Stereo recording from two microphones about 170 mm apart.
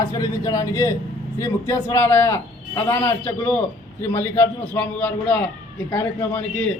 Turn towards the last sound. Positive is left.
turn(degrees=5)  # may be behind; listen again after turning